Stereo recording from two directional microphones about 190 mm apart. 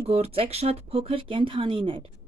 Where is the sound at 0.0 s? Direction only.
30° right (ahead or behind).